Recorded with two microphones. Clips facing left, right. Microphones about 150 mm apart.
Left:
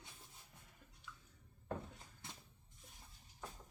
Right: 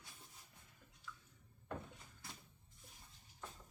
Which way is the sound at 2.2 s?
20° left (ahead or behind).